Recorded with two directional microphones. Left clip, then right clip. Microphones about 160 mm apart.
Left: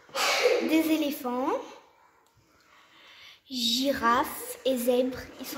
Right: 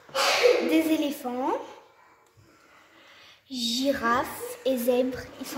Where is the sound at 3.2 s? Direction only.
30° left (ahead or behind).